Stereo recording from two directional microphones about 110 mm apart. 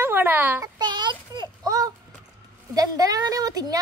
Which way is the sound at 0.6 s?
40° right (ahead or behind).